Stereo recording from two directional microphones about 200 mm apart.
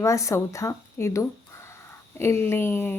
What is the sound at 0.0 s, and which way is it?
A woman's voice, 15° left (ahead or behind).